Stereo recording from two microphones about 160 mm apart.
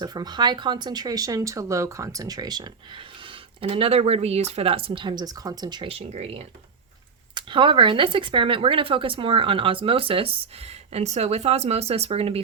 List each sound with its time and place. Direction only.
0.0 s speech: 25° right (ahead or behind)